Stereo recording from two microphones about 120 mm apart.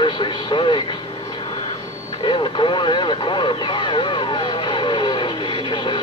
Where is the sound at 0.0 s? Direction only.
40° left (ahead or behind).